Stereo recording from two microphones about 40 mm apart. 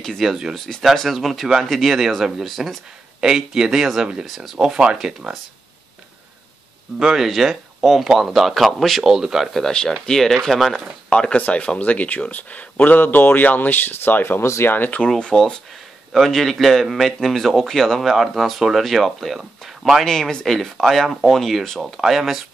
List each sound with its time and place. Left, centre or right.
0.2 s speech: centre
0.6 s a man's voice: centre
3.2 s speech: centre
7.0 s a man's voice: centre
9.0 s speech: centre
9.7 s speech: centre
11.1 s speech: left
15.3 s a man's voice: centre
18.1 s a man's voice: centre